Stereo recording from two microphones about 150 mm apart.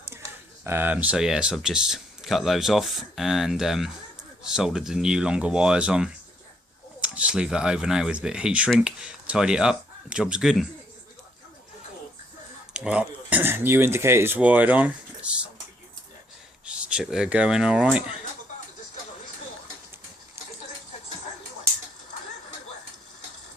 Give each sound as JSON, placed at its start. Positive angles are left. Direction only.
{"t": 0.1, "sound": "a sound", "side_deg": -15}
{"t": 0.6, "sound": "speech", "side_deg": -15}
{"t": 12.7, "sound": "speech", "side_deg": -5}
{"t": 16.6, "sound": "speech", "side_deg": -5}